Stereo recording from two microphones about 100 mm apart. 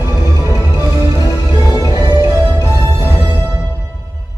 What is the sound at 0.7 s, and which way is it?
Music, 35° left (ahead or behind).